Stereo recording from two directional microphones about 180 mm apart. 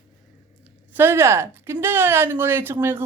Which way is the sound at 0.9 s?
15° right (ahead or behind).